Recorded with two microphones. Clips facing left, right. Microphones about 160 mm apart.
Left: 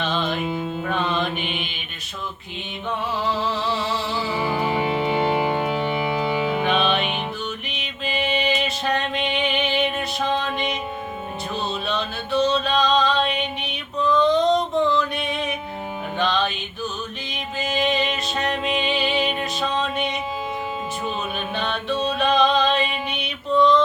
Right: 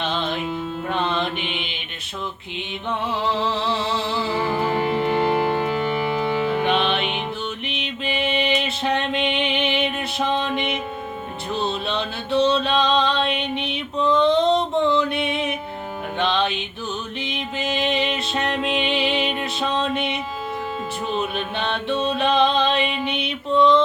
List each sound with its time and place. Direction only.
0.0 s music: 25° right (ahead or behind)
3.2 s music: 25° right (ahead or behind)
4.3 s music: 5° left (ahead or behind)
7.7 s music: 25° right (ahead or behind)
11.6 s a sound: 25° right (ahead or behind)
16.1 s music: 25° right (ahead or behind)
21.3 s music: 25° right (ahead or behind)